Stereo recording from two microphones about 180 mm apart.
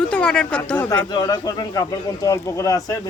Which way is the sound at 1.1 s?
20° left (ahead or behind).